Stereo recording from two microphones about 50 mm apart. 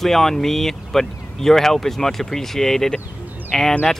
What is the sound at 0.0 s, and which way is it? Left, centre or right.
Speech, centre.